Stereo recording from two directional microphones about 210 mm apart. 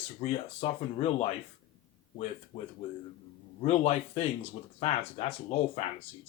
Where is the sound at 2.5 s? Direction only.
30° left (ahead or behind).